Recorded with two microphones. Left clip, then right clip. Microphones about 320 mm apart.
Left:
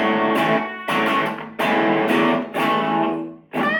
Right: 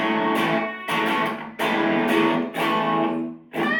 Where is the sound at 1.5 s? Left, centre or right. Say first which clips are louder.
Left 4 dB; left.